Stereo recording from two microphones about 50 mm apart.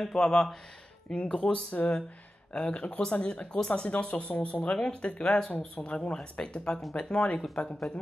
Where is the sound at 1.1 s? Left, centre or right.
Left.